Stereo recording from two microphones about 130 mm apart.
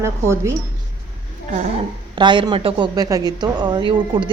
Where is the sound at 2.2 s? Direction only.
35° right (ahead or behind).